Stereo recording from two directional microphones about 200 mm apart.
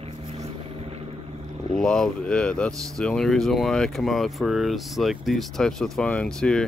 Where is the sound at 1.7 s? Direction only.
5° left (ahead or behind).